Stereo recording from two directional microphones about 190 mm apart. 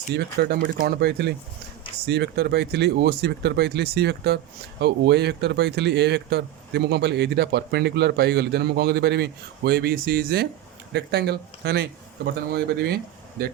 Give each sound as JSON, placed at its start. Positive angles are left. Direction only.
{"t": 0.1, "sound": "a man's voice", "side_deg": -60}